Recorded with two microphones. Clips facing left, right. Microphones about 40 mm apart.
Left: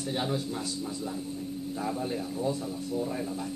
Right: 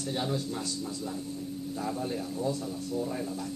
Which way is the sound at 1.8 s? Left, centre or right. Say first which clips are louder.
Left 1 dB; centre.